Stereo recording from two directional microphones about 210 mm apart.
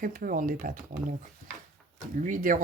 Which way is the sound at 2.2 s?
40° right (ahead or behind).